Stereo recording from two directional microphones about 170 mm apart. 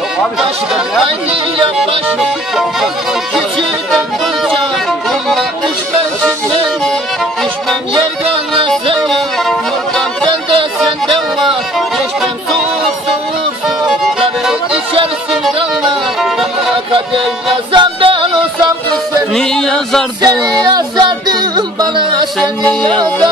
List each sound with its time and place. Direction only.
9.1 s music: centre (ahead or behind)
15.4 s music: centre (ahead or behind)
17.7 s music: 30° right (ahead or behind)
19.3 s music: 5° left (ahead or behind)
20.2 s music: 25° right (ahead or behind)
22.4 s music: 5° left (ahead or behind)
22.8 s music: 25° right (ahead or behind)